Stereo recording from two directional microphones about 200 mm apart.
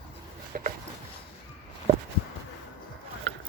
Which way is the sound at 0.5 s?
45° right (ahead or behind).